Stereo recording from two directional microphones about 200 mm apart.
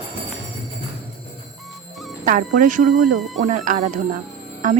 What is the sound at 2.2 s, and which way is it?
Speech, 40° right (ahead or behind).